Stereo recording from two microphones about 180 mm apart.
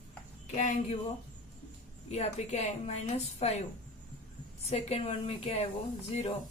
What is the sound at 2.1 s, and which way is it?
A woman's voice, 35° left (ahead or behind).